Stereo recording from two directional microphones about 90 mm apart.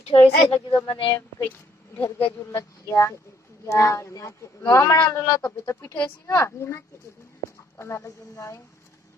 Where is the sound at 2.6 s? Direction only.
30° left (ahead or behind).